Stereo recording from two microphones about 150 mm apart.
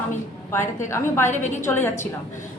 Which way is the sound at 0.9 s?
15° left (ahead or behind).